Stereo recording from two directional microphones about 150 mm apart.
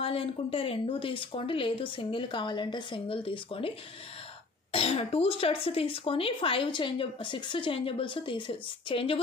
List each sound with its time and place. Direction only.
0.0 s speech: 40° left (ahead or behind)
4.7 s speech: 40° left (ahead or behind)